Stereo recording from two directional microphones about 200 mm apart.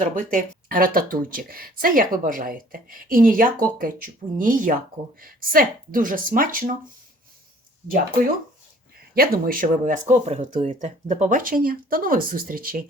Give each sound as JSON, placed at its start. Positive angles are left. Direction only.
{"t": 0.0, "sound": "speech", "side_deg": -40}
{"t": 9.1, "sound": "speech", "side_deg": -50}